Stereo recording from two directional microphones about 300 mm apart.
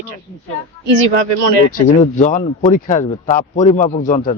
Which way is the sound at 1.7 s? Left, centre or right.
Left.